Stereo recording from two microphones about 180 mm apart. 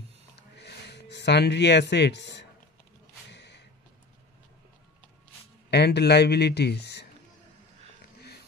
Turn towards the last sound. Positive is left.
turn(degrees=65)  # may be behind; listen again after turning